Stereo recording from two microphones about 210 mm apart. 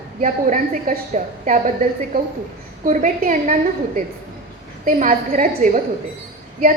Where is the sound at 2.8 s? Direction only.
40° right (ahead or behind).